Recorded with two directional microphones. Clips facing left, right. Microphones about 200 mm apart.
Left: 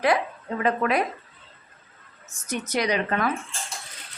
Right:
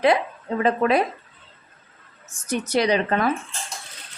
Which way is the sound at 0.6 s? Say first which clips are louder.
Right 4 dB; 30° right (ahead or behind).